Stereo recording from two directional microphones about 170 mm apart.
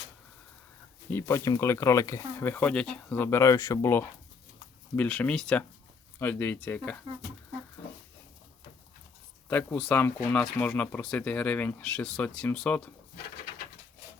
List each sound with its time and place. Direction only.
1.1 s speech: 20° left (ahead or behind)
9.5 s speech: 10° left (ahead or behind)